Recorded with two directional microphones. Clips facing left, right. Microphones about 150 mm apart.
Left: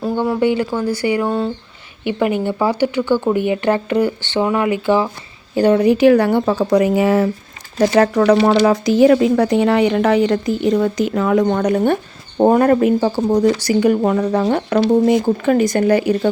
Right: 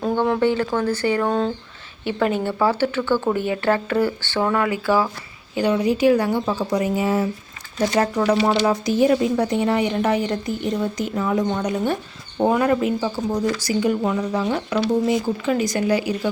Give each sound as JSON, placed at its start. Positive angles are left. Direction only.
{"t": 0.0, "sound": "speech", "side_deg": 10}
{"t": 5.5, "sound": "speech", "side_deg": 50}
{"t": 7.8, "sound": "speech", "side_deg": 90}
{"t": 8.6, "sound": "speech", "side_deg": 90}
{"t": 12.4, "sound": "speech", "side_deg": 45}